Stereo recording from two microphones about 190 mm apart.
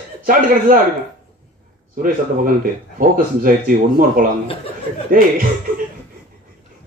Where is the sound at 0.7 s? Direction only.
50° right (ahead or behind).